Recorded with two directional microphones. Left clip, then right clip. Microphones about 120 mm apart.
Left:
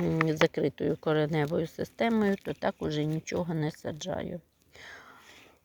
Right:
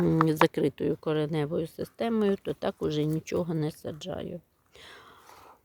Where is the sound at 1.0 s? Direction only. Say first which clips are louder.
Left 1 dB; 10° right (ahead or behind).